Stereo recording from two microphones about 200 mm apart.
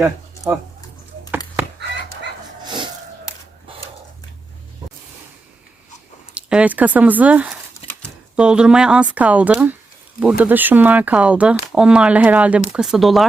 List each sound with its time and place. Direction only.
0.0 s speech: 10° right (ahead or behind)
2.6 s a sound: 25° right (ahead or behind)
6.3 s speech: 5° right (ahead or behind)